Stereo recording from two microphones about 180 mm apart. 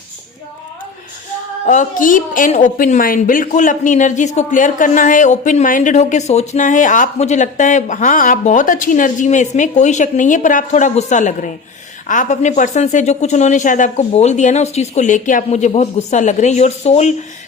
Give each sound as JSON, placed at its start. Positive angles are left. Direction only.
{"t": 1.6, "sound": "a woman's voice", "side_deg": 45}